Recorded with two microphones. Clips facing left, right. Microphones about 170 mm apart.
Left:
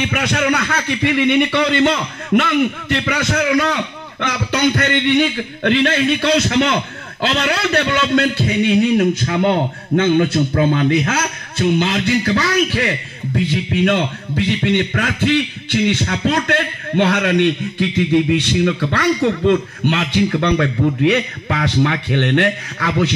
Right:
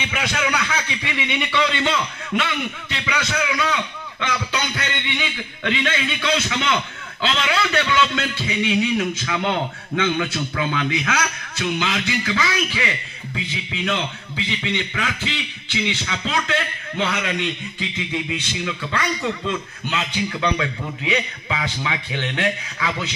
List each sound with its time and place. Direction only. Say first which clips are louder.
0.0 s a man's voice: left 6 dB; 55° left (ahead or behind)